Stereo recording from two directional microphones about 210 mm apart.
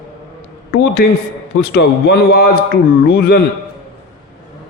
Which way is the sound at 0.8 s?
50° left (ahead or behind).